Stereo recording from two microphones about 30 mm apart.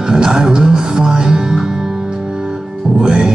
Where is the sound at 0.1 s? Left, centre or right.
Right.